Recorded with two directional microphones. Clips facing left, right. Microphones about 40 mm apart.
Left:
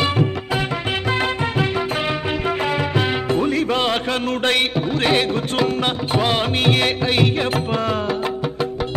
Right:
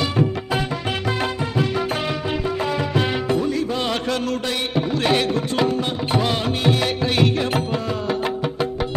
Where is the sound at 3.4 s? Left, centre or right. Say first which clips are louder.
Left 3 dB; left.